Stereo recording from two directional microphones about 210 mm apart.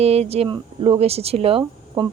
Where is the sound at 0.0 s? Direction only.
30° right (ahead or behind).